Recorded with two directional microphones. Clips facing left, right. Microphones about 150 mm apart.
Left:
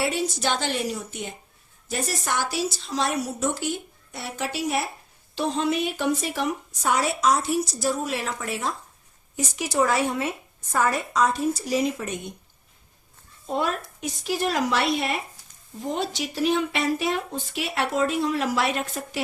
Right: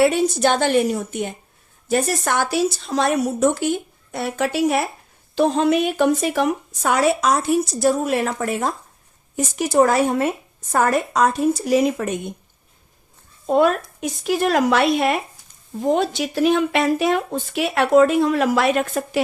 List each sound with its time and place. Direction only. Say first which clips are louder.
0.0 s speech: right 9 dB; 50° right (ahead or behind)
13.5 s speech: right 10 dB; 55° right (ahead or behind)